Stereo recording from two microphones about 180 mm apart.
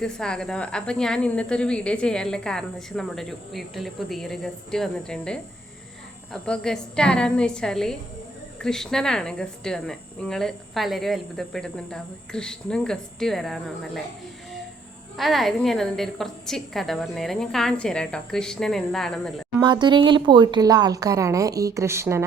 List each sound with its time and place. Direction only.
0.0 s a woman's voice: 5° left (ahead or behind)
15.1 s a woman's voice: centre (ahead or behind)
19.6 s a woman's voice: 25° right (ahead or behind)